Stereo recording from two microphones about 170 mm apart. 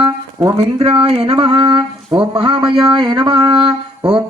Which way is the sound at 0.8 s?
35° right (ahead or behind).